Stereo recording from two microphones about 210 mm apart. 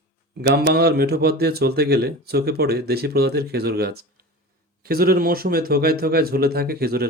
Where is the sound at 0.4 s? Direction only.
50° right (ahead or behind).